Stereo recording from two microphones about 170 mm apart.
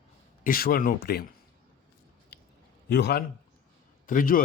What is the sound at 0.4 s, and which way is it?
Speech, 60° left (ahead or behind).